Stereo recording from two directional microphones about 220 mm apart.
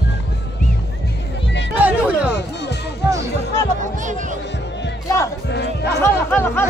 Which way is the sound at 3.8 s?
35° right (ahead or behind).